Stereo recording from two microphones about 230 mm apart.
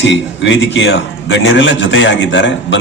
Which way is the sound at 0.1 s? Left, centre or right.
Left.